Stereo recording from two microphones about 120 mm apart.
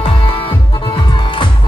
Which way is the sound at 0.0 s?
45° left (ahead or behind).